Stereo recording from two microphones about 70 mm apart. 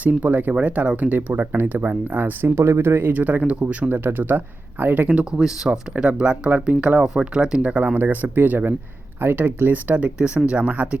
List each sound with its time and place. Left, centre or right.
0.0 s speech: right
5.4 s speech: centre